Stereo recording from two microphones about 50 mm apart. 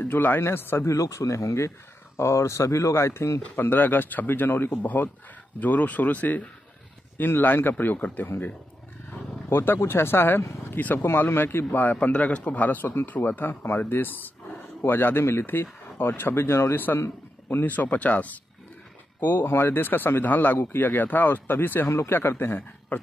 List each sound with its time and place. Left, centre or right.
0.0 s speech: left
0.4 s a man's voice: left
0.8 s speech: left
3.5 s a man's voice: left
9.5 s a man's voice: left
21.8 s speech: left